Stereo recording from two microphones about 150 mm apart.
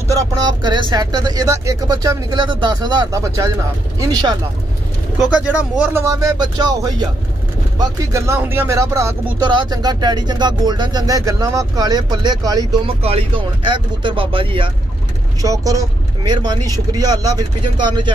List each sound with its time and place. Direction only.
0.1 s speech: 25° right (ahead or behind)
5.2 s speech: 10° right (ahead or behind)
6.0 s speech: 25° right (ahead or behind)
9.5 s speech: 30° right (ahead or behind)
13.0 s speech: 35° right (ahead or behind)
15.4 s speech: 20° right (ahead or behind)